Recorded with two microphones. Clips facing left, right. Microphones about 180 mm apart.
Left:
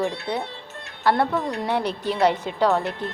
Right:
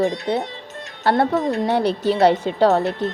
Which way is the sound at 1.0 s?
30° right (ahead or behind).